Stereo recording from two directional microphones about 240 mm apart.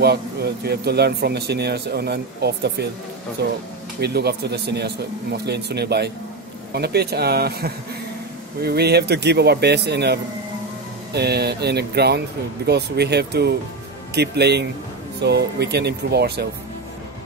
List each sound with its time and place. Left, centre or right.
0.0 s speech: right